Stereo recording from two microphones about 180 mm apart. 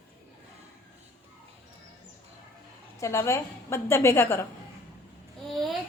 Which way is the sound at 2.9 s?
15° left (ahead or behind).